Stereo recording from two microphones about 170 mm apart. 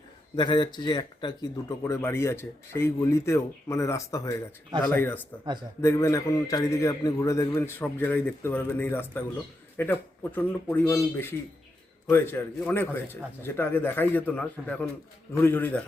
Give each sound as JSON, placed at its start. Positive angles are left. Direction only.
{"t": 0.3, "sound": "speech", "side_deg": 25}